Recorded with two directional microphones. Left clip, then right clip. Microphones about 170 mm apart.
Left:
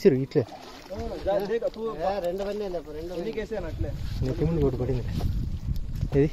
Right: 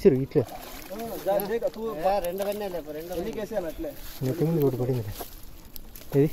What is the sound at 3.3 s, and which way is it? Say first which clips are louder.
Speech: right 2 dB; 25° left (ahead or behind).